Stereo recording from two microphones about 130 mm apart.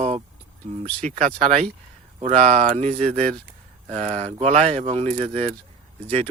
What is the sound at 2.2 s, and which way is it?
Speech, 55° right (ahead or behind).